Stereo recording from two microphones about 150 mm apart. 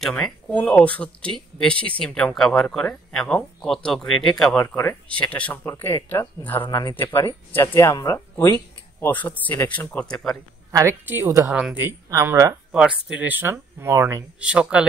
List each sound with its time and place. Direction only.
0.0 s speech: 5° left (ahead or behind)
4.6 s speech: 15° left (ahead or behind)
10.7 s a woman's voice: 20° right (ahead or behind)
12.1 s a woman's voice: 20° right (ahead or behind)
12.7 s speech: 5° right (ahead or behind)